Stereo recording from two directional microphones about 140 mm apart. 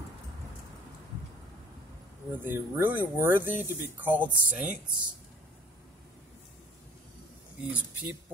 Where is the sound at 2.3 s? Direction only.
15° right (ahead or behind).